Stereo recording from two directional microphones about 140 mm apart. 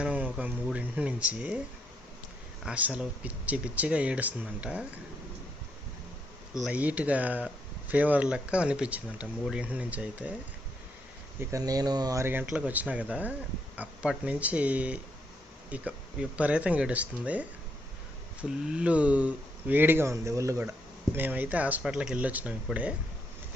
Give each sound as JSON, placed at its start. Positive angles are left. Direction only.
{"t": 0.0, "sound": "a sound", "side_deg": -10}
{"t": 0.7, "sound": "speech", "side_deg": -10}
{"t": 2.6, "sound": "speech", "side_deg": -10}
{"t": 6.7, "sound": "speech", "side_deg": -10}
{"t": 11.3, "sound": "speech", "side_deg": -25}
{"t": 12.2, "sound": "speech", "side_deg": -15}